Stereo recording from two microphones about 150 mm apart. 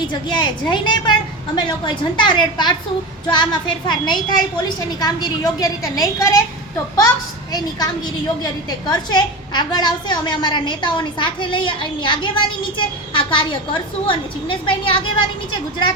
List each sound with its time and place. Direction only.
0.1 s a woman's voice: 30° left (ahead or behind)
8.9 s a woman's voice: 30° left (ahead or behind)